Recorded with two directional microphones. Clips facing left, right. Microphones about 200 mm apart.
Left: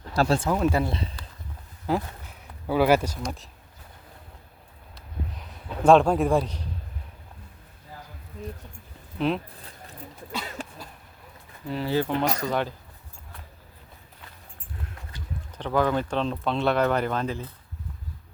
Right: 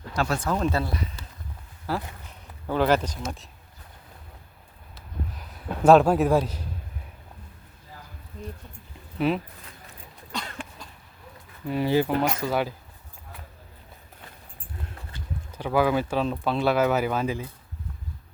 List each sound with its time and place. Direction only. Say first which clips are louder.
0.1 s speech: left 4 dB; 30° left (ahead or behind)
0.5 s speech: left 2 dB; 5° left (ahead or behind)
0.8 s speech: left 2 dB; 25° left (ahead or behind); by 3.5 s centre (ahead or behind)
4.9 s a sound: right 1 dB; 5° right (ahead or behind)
9.1 s speech: right 1 dB; 5° right (ahead or behind)
10.6 s cough: left 2 dB; 40° left (ahead or behind)
11.7 s speech: right 3 dB; 15° right (ahead or behind)
15.5 s speech: right 1 dB; 10° right (ahead or behind)